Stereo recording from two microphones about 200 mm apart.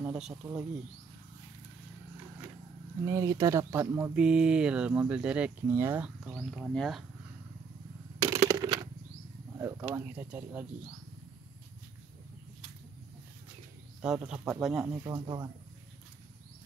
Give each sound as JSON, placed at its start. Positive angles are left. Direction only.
{"t": 0.0, "sound": "speech", "side_deg": -5}
{"t": 3.1, "sound": "speech", "side_deg": -15}
{"t": 8.2, "sound": "a sound", "side_deg": -20}
{"t": 9.6, "sound": "speech", "side_deg": -10}
{"t": 14.0, "sound": "speech", "side_deg": -5}
{"t": 15.0, "sound": "speech", "side_deg": -20}